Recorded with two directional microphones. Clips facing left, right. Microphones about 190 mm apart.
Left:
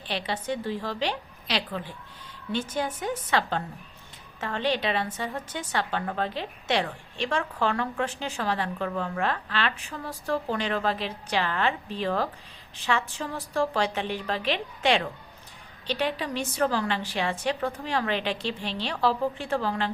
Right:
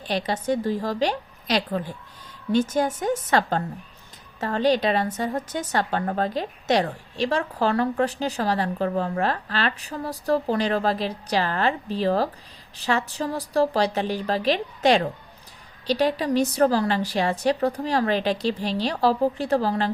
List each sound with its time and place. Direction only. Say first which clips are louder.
0.0 s a woman's voice: right 5 dB; 40° right (ahead or behind)